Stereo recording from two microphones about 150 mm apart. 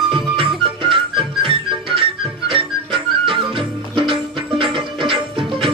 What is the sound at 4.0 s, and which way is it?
Music, 35° right (ahead or behind).